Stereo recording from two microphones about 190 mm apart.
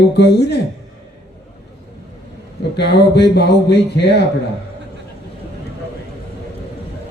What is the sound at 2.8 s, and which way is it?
Speech, 65° left (ahead or behind).